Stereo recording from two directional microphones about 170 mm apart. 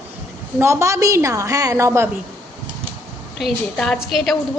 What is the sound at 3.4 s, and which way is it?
A woman's voice, centre (ahead or behind).